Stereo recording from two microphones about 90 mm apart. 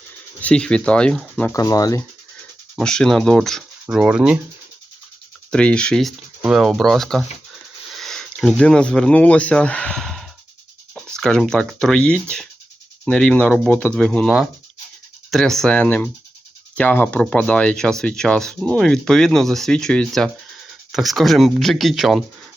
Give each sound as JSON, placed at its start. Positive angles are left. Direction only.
{"t": 0.4, "sound": "speech", "side_deg": 10}
{"t": 1.5, "sound": "speech", "side_deg": 40}
{"t": 2.7, "sound": "speech", "side_deg": 10}
{"t": 3.8, "sound": "speech", "side_deg": -10}
{"t": 5.5, "sound": "speech", "side_deg": 10}
{"t": 15.3, "sound": "speech", "side_deg": 5}